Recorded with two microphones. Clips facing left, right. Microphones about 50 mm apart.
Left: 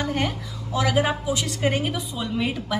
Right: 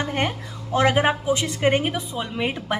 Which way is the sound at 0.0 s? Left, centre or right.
Right.